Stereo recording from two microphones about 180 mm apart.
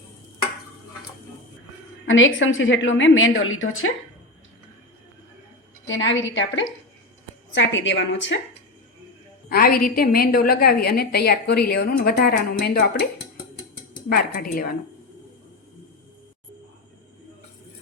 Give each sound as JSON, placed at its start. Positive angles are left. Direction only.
{"t": 2.0, "sound": "a woman's voice", "side_deg": 90}
{"t": 5.9, "sound": "a woman's voice", "side_deg": 90}
{"t": 9.5, "sound": "a woman's voice", "side_deg": 55}
{"t": 14.1, "sound": "a woman's voice", "side_deg": 50}